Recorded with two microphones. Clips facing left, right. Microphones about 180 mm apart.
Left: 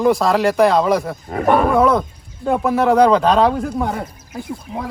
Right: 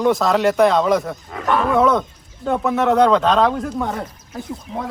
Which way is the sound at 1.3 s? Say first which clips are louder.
Left 5 dB; 50° left (ahead or behind).